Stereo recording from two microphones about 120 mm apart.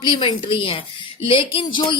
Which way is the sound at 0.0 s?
45° left (ahead or behind).